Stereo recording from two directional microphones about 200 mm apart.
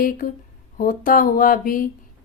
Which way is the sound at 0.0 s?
45° left (ahead or behind).